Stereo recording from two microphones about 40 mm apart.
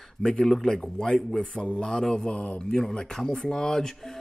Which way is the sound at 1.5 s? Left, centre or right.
Left.